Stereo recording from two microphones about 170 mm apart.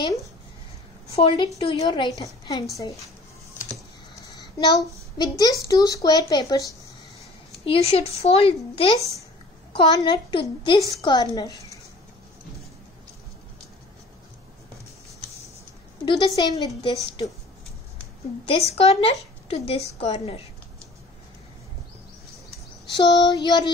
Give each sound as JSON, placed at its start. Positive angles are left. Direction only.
{"t": 0.0, "sound": "speech", "side_deg": 20}
{"t": 1.1, "sound": "a woman's voice", "side_deg": 30}
{"t": 4.1, "sound": "a sound", "side_deg": 20}
{"t": 5.1, "sound": "speech", "side_deg": 20}
{"t": 7.6, "sound": "a woman's voice", "side_deg": 35}
{"t": 16.1, "sound": "speech", "side_deg": 25}
{"t": 18.7, "sound": "a woman's voice", "side_deg": 35}
{"t": 22.9, "sound": "speech", "side_deg": 25}